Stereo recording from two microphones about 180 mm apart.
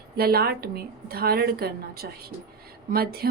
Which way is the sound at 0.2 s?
60° right (ahead or behind).